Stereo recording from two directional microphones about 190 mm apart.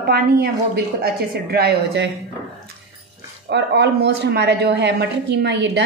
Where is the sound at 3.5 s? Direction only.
60° right (ahead or behind).